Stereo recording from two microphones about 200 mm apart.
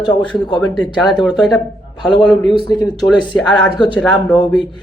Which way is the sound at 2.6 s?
20° left (ahead or behind).